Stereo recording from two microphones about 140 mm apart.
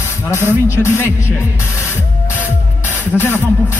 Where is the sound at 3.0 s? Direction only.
15° left (ahead or behind).